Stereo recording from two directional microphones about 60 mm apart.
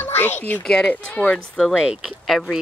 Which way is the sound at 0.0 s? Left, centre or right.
Left.